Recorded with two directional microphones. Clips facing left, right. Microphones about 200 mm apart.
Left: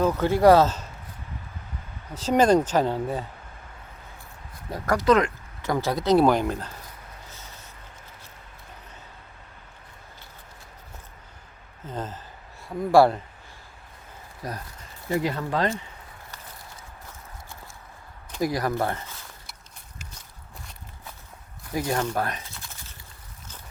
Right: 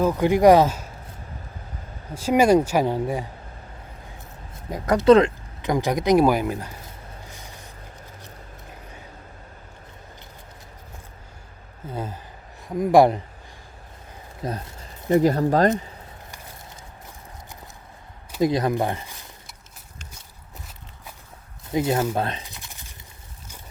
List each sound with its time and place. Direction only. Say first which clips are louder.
0.0 s speech: right 2 dB; 15° right (ahead or behind)
2.1 s speech: right 2 dB; 10° right (ahead or behind)
4.7 s speech: right 6 dB; 20° right (ahead or behind)
5.6 s speech: right 3 dB; 15° right (ahead or behind)
6.8 s music: right 3 dB; 15° right (ahead or behind)
11.9 s speech: right 2 dB; 10° right (ahead or behind)
14.4 s speech: right 5 dB; 25° right (ahead or behind)
15.1 s speech: right 8 dB; 40° right (ahead or behind)
18.3 s speech: right 4 dB; 20° right (ahead or behind)
21.7 s speech: right 4 dB; 20° right (ahead or behind)
22.1 s bird: right 2 dB; 25° right (ahead or behind)